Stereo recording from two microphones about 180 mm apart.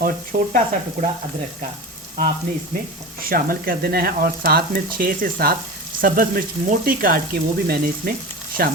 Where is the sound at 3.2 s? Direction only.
55° right (ahead or behind).